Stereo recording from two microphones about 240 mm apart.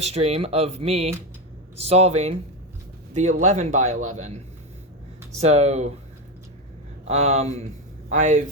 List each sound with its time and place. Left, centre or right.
0.0 s speech: right
5.4 s speech: right
7.1 s speech: right